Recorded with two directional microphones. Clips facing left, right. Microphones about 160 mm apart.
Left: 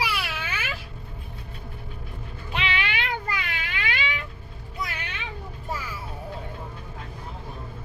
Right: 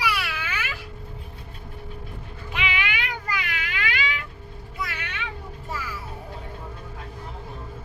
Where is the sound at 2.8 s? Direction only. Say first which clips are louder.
Left 1 dB; 30° left (ahead or behind).